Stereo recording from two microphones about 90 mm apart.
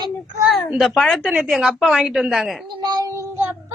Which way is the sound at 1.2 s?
10° right (ahead or behind).